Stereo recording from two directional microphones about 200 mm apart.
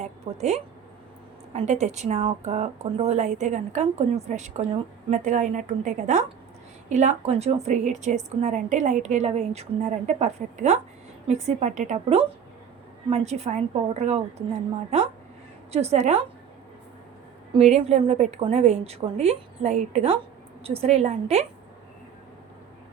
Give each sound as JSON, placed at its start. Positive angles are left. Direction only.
{"t": 0.0, "sound": "a sound", "side_deg": -35}
{"t": 1.5, "sound": "a woman's voice", "side_deg": -35}
{"t": 17.6, "sound": "a woman's voice", "side_deg": -35}